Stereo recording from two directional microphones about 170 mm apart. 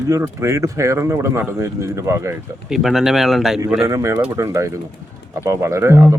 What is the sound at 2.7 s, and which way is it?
Speech, centre (ahead or behind).